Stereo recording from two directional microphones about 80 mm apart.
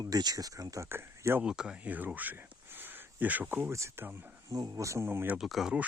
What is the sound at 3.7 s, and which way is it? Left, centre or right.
Speech, right.